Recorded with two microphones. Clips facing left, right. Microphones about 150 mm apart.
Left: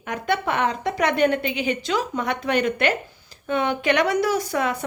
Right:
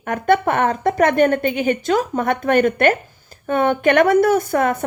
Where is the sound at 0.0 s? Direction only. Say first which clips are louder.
Right 7 dB; 50° right (ahead or behind).